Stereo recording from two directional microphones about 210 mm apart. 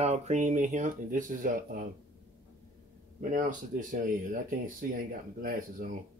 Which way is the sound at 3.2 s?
40° right (ahead or behind).